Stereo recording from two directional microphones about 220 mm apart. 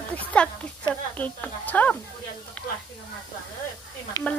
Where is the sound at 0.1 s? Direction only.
5° left (ahead or behind).